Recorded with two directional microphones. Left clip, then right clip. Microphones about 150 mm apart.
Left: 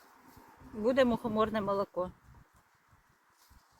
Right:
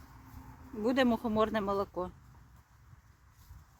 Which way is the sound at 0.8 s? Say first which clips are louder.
Left 2 dB; 30° right (ahead or behind).